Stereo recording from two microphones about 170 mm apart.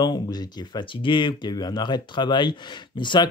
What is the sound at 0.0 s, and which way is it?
Speech, 25° left (ahead or behind).